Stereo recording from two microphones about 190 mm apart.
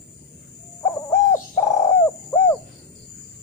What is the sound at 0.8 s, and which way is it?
Bird, 10° left (ahead or behind).